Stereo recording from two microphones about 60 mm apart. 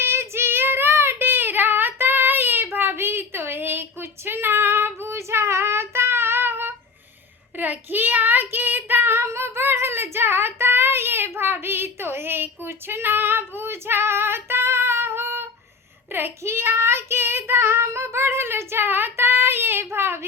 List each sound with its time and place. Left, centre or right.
0.0 s child singing: right